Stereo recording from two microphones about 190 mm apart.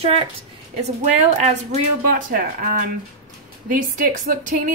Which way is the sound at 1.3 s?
40° right (ahead or behind).